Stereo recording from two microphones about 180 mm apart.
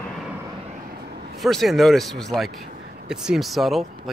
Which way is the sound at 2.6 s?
55° right (ahead or behind).